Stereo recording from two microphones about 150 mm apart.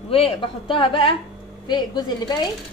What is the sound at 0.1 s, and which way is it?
A woman's voice, 35° left (ahead or behind).